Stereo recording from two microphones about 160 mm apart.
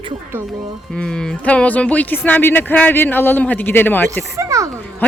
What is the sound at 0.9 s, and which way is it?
Speech, 5° left (ahead or behind).